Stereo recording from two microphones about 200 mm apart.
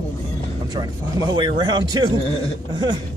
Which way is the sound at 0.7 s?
20° right (ahead or behind).